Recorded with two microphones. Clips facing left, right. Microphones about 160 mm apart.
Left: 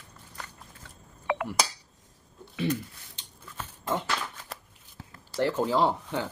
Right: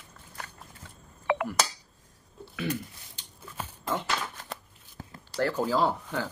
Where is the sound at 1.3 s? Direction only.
90° right.